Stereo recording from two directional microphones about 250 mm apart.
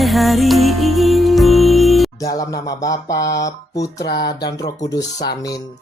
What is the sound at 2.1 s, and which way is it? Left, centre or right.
Speech, centre.